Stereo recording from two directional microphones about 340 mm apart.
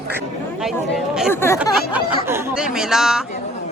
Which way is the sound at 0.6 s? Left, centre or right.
Centre.